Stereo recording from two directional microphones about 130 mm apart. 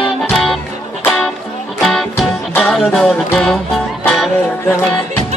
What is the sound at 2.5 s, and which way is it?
Music, 10° left (ahead or behind).